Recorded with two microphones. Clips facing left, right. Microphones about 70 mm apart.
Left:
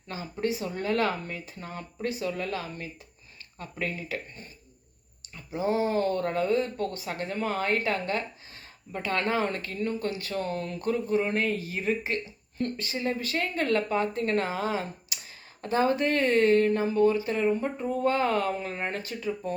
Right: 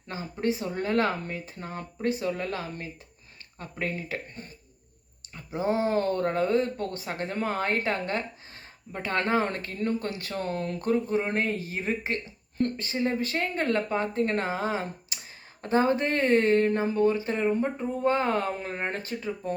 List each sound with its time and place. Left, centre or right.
0.1 s speech: right
5.3 s speech: right